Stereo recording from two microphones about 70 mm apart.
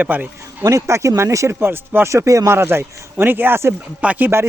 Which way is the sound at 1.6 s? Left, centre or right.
Right.